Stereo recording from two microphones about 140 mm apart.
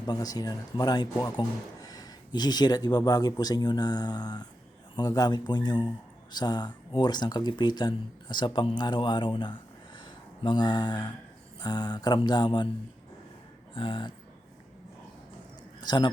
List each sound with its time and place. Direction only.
0.0 s speech: 30° left (ahead or behind)
13.7 s speech: 35° left (ahead or behind)
15.8 s a man's voice: 30° left (ahead or behind)